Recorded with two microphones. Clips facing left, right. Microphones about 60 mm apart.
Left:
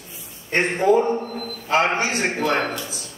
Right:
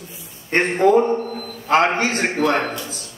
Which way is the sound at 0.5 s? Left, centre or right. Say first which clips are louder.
Right 3 dB; right.